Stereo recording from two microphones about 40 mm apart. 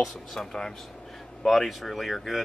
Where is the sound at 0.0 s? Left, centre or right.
Centre.